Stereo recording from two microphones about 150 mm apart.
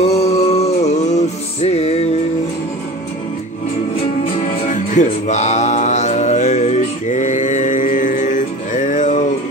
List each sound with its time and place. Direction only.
0.0 s music: 45° left (ahead or behind)
4.4 s music: 55° left (ahead or behind)